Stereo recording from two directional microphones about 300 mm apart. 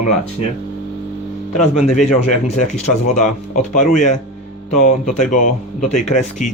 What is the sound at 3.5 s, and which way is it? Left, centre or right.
Speech, left.